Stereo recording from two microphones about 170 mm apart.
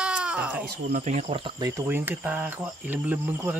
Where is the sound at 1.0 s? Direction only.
40° right (ahead or behind).